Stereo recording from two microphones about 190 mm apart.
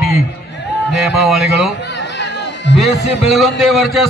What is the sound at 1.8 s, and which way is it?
Chatter, 65° left (ahead or behind).